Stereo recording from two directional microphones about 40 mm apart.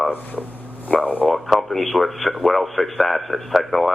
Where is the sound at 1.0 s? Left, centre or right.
Left.